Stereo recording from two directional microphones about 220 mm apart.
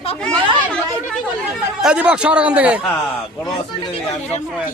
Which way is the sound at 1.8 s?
5° right (ahead or behind).